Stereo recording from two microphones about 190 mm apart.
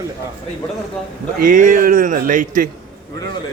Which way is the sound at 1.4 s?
45° right (ahead or behind).